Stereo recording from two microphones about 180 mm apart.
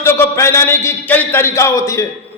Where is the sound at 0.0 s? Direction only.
15° left (ahead or behind).